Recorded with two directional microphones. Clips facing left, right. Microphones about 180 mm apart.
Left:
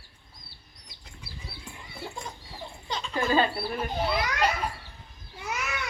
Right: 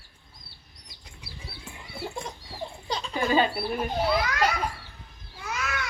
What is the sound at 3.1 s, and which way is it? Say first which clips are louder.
Speech: right 1 dB; 10° right (ahead or behind).